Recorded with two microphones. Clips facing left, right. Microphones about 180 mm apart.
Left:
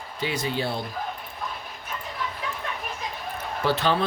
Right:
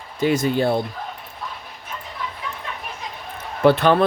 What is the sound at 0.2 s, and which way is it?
Speech, 45° right (ahead or behind).